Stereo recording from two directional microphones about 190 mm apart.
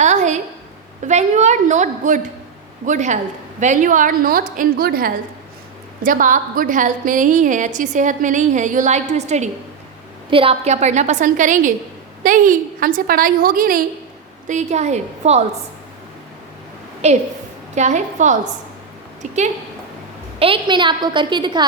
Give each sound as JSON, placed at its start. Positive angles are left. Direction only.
{"t": 0.0, "sound": "a sound", "side_deg": -40}
{"t": 1.0, "sound": "a woman's voice", "side_deg": -40}
{"t": 17.0, "sound": "a woman's voice", "side_deg": -35}
{"t": 20.4, "sound": "a woman's voice", "side_deg": -25}